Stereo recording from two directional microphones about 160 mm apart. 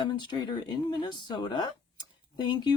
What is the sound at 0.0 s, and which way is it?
Speech, 25° left (ahead or behind).